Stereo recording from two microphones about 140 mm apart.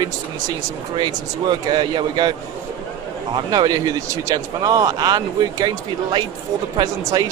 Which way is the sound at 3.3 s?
30° right (ahead or behind).